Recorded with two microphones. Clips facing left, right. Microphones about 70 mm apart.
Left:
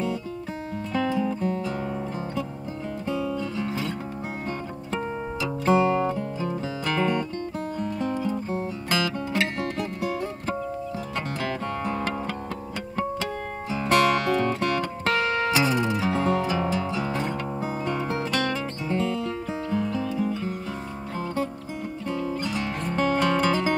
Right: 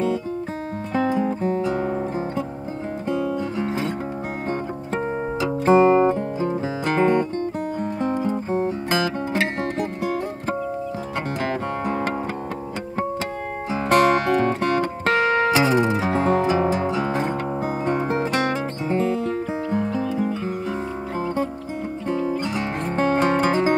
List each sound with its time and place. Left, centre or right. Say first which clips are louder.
0.9 s music: right 4 dB; right
3.1 s guitar: right 4 dB; right
4.5 s music: right 7 dB; right
13.7 s music: right 4 dB; right
22.4 s music: right 3 dB; right